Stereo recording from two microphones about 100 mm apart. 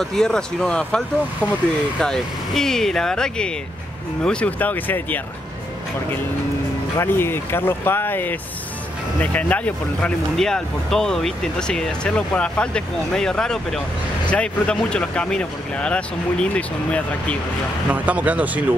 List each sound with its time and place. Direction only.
0.0 s speech: 5° left (ahead or behind)
7.0 s speech: 25° left (ahead or behind)
18.0 s speech: 15° right (ahead or behind)